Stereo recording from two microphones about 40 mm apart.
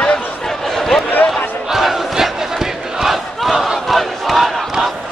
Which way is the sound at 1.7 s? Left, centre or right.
Centre.